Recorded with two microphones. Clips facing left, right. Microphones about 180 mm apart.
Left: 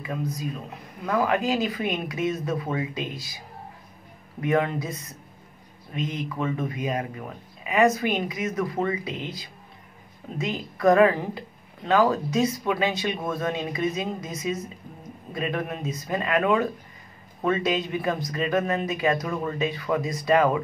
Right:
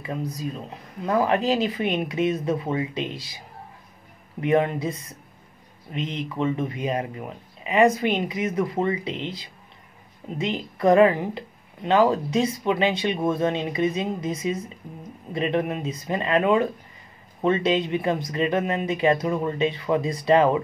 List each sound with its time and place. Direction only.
0.0 s a woman's voice: 30° right (ahead or behind)
4.4 s a woman's voice: 20° right (ahead or behind)
5.9 s a woman's voice: 25° right (ahead or behind)